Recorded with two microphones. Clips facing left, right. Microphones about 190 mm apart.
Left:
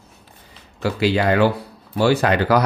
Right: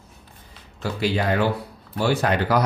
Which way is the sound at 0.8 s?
85° left.